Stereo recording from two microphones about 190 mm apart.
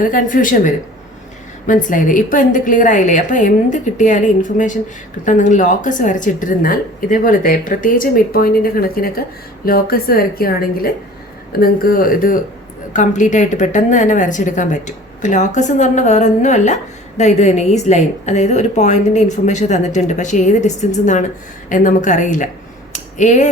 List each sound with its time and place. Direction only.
0.0 s a woman's voice: 45° left (ahead or behind)
22.9 s finger snapping: 40° left (ahead or behind)